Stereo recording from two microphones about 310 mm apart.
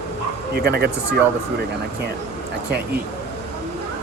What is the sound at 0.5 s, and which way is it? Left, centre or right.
Speech, right.